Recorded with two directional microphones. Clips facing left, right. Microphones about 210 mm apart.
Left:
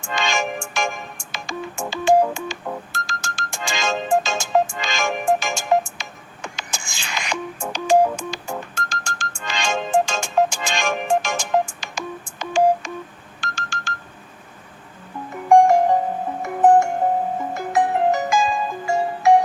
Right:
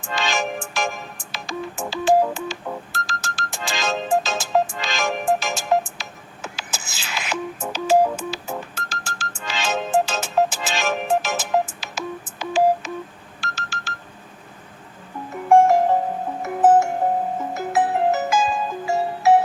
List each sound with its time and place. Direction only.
0.0 s music: centre (ahead or behind)
13.6 s ringtone: 5° right (ahead or behind)
15.4 s music: centre (ahead or behind)